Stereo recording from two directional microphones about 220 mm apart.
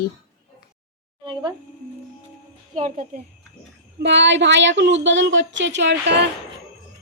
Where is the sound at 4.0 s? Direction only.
55° right (ahead or behind).